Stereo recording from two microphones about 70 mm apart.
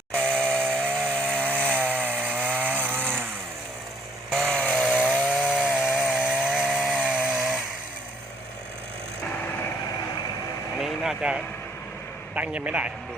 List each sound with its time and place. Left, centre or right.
0.1 s chainsaw: centre
0.7 s chainsaw: right
4.5 s chainsaw: centre
5.0 s chainsaw: centre
10.8 s vehicle: centre
12.3 s a man's voice: right